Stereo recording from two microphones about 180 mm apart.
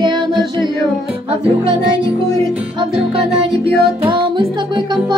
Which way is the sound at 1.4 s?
30° right (ahead or behind).